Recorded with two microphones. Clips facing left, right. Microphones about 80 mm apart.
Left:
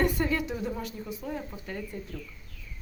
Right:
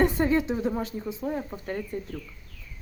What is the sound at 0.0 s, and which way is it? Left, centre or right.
Speech, right.